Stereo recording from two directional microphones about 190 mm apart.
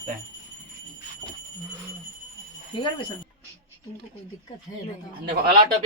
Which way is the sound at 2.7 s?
30° left (ahead or behind).